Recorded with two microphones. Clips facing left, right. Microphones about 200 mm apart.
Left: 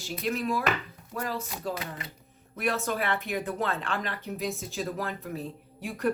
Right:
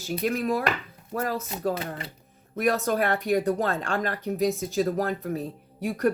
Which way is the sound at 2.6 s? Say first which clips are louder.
Right 6 dB; 40° right (ahead or behind).